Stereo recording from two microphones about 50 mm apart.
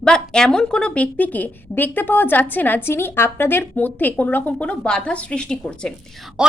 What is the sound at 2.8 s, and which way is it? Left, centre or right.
Speech, left.